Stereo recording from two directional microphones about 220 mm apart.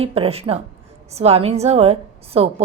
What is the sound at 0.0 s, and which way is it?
A woman's voice, 25° right (ahead or behind).